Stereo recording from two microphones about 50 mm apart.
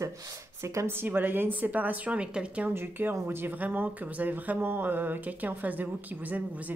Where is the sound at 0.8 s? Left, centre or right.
Right.